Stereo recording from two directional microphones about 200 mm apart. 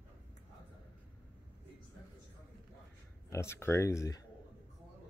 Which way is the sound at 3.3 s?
15° left (ahead or behind).